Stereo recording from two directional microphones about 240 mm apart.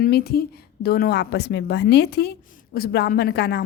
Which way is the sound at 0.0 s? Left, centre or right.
Left.